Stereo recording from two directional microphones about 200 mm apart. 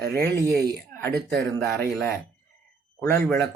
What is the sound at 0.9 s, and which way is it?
Speech, 10° left (ahead or behind).